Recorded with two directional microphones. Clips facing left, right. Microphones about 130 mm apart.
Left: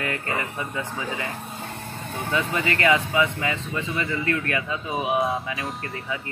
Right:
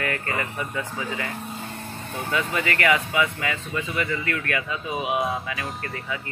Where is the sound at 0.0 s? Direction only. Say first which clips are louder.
Even; 25° left (ahead or behind).